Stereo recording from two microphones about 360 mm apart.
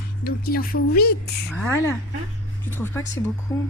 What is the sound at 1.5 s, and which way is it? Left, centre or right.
A woman's voice, centre.